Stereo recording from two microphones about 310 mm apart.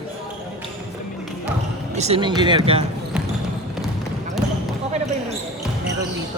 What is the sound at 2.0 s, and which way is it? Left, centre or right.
Speech, centre.